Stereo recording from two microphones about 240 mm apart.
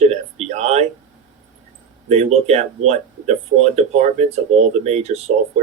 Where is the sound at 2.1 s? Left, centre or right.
Right.